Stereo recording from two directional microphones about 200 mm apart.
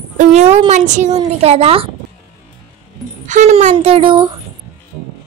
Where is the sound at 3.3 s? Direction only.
35° right (ahead or behind).